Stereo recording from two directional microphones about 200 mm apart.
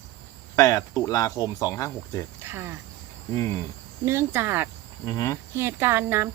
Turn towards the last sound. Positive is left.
turn(degrees=-10)  # may be behind; listen again after turning